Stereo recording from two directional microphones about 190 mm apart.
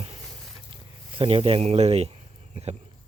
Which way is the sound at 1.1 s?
30° right (ahead or behind).